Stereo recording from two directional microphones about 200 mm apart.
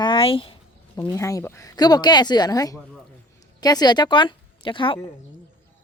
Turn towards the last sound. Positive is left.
turn(degrees=25)  # may be behind; listen again after turning